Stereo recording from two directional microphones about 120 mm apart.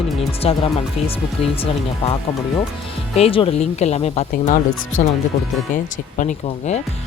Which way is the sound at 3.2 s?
50° left (ahead or behind).